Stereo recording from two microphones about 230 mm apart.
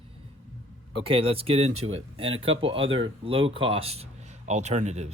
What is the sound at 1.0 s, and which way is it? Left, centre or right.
Speech, right.